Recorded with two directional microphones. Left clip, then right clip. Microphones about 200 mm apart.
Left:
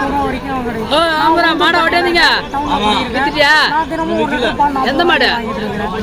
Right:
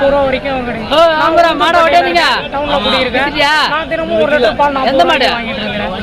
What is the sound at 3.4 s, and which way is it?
Speech, 45° right (ahead or behind).